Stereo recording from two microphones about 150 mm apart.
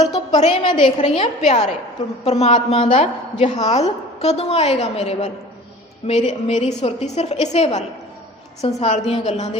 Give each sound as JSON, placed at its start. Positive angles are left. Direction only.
{"t": 0.2, "sound": "a woman's voice", "side_deg": 35}
{"t": 0.9, "sound": "a woman's voice", "side_deg": 45}
{"t": 8.9, "sound": "a woman's voice", "side_deg": 45}